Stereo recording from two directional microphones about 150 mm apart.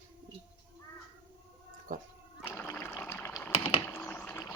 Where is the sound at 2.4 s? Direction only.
15° left (ahead or behind).